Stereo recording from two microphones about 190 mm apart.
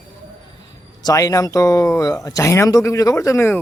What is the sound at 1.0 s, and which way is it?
A man's voice, 20° left (ahead or behind).